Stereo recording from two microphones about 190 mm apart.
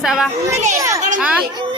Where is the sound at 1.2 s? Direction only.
5° right (ahead or behind).